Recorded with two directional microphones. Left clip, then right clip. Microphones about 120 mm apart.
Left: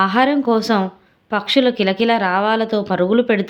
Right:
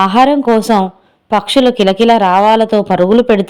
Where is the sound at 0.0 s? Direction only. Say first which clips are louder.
Right 6 dB; 55° right (ahead or behind).